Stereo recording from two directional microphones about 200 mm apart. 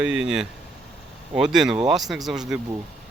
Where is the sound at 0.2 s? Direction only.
5° right (ahead or behind).